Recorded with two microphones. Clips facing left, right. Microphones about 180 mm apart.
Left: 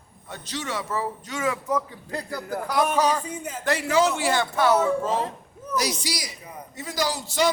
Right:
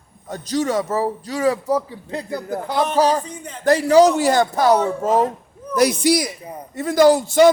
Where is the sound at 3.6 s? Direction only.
40° right (ahead or behind).